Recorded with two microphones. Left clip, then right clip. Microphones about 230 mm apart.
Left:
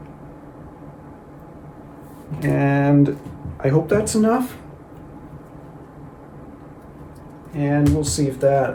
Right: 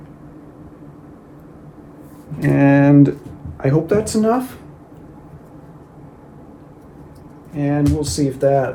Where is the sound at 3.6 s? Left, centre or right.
Right.